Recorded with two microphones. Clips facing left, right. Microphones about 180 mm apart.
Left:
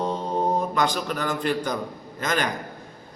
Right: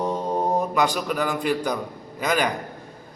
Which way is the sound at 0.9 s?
5° right (ahead or behind).